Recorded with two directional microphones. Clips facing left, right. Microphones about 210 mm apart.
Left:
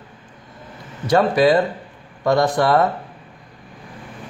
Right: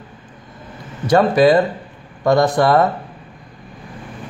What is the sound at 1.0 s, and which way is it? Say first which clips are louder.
Speech: right 3 dB; 45° right (ahead or behind).